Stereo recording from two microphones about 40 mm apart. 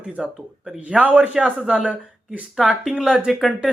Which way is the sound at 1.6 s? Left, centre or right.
Right.